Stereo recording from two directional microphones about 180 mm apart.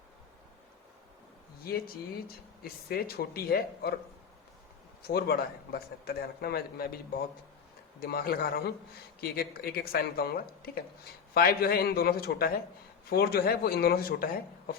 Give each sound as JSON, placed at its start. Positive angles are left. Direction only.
{"t": 2.2, "sound": "a man's voice", "side_deg": 55}
{"t": 5.0, "sound": "a man's voice", "side_deg": 60}